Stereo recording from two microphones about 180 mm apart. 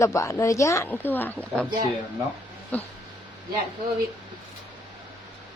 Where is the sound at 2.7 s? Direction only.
10° left (ahead or behind).